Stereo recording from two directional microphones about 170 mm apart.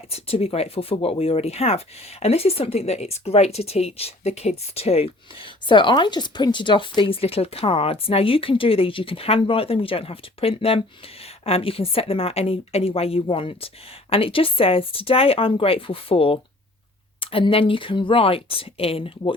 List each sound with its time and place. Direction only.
0.1 s speech: 35° left (ahead or behind)